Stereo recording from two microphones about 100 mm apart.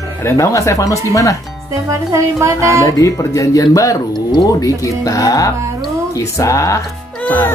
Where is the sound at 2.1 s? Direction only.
30° right (ahead or behind).